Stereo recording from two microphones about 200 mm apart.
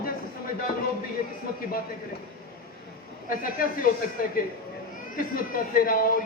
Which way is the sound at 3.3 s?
45° left (ahead or behind).